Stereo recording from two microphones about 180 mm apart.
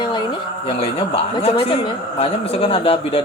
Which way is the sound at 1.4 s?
30° left (ahead or behind).